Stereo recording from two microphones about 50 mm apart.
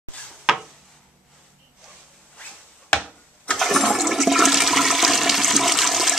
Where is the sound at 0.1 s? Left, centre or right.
Left.